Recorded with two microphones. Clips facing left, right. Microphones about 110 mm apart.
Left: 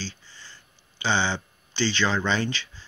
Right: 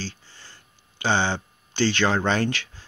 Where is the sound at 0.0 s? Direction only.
50° right (ahead or behind).